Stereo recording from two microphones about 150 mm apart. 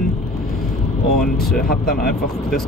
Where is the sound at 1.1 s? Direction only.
5° left (ahead or behind).